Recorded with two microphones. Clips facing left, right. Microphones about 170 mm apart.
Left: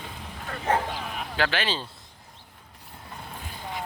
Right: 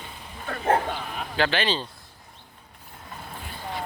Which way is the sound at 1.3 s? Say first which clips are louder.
Right 3 dB; 5° left (ahead or behind).